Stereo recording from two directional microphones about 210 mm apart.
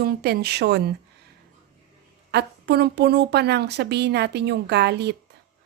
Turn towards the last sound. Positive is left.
turn(degrees=-50)  # may be behind; listen again after turning